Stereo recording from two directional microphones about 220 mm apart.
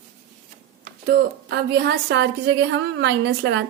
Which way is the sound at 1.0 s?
45° right (ahead or behind).